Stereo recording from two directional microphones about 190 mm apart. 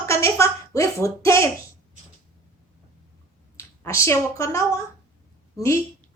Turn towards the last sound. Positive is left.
turn(degrees=15)  # may be behind; listen again after turning